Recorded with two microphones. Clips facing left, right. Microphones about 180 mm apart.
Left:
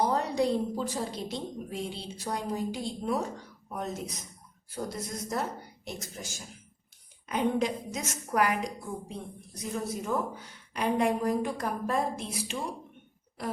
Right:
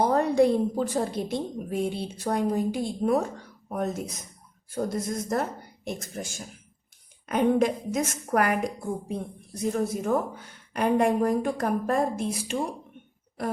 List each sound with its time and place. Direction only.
0.0 s a woman's voice: 55° right (ahead or behind)
4.7 s a woman's voice: 50° right (ahead or behind)